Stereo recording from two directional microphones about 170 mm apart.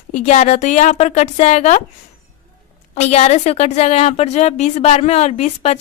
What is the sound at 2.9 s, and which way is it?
A woman's voice, 40° left (ahead or behind).